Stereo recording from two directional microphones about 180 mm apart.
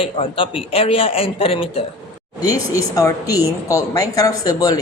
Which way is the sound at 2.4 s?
20° left (ahead or behind).